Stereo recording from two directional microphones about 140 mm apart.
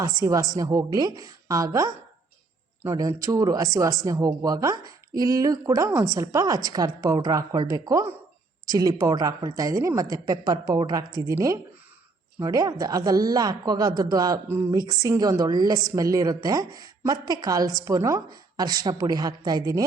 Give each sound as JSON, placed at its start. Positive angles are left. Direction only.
{"t": 0.0, "sound": "speech", "side_deg": -25}